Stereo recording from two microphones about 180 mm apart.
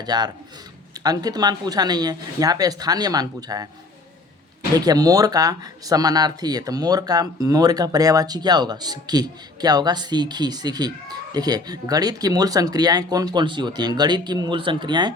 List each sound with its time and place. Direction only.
0.0 s speech: 20° right (ahead or behind)
4.9 s speech: 20° right (ahead or behind)